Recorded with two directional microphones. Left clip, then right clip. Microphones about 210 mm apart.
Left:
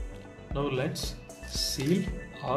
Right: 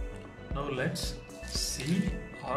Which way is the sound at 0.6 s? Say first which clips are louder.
Left 3 dB; 15° left (ahead or behind).